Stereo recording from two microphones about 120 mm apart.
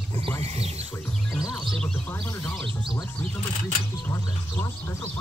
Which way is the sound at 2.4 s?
10° left (ahead or behind).